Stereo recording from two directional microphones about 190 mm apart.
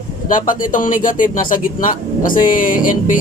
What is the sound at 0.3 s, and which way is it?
Speech, 45° left (ahead or behind).